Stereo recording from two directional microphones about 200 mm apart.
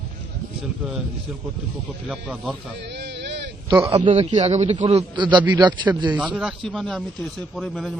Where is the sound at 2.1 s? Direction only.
Centre (ahead or behind).